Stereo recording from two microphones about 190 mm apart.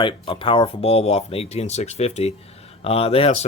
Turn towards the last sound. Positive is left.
turn(degrees=30)  # may be behind; listen again after turning